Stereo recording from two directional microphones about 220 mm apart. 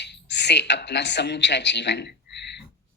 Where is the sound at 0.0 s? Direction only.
50° left (ahead or behind).